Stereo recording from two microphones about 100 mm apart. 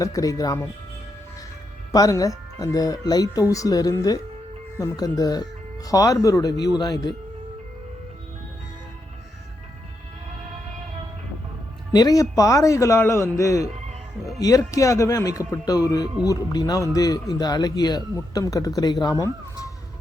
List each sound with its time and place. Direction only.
0.0 s speech: 35° left (ahead or behind)
1.9 s speech: 35° left (ahead or behind)
11.9 s speech: 35° left (ahead or behind)